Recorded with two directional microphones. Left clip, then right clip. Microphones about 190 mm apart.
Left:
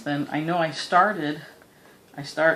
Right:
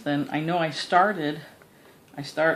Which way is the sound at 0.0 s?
35° right (ahead or behind).